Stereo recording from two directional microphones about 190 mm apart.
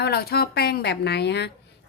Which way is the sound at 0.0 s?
55° left (ahead or behind).